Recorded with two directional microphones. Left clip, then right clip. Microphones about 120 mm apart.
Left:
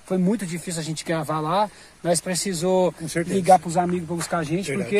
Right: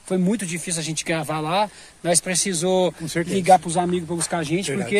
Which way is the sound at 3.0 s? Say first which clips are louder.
Right 1 dB; 30° right (ahead or behind).